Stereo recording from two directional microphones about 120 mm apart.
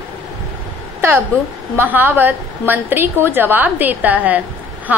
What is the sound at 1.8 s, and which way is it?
A woman's voice, 15° right (ahead or behind).